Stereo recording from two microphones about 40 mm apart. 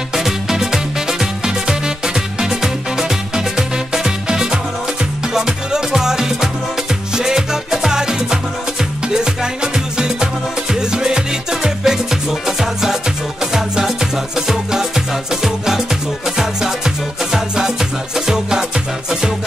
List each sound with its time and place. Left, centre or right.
0.1 s music: centre